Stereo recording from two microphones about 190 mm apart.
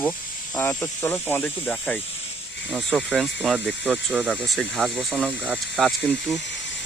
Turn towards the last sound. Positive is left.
turn(degrees=70)  # may be behind; listen again after turning